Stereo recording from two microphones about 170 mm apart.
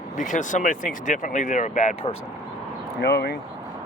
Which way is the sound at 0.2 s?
50° left (ahead or behind).